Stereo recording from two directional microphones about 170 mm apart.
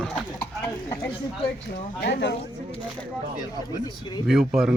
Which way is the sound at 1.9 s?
75° left (ahead or behind).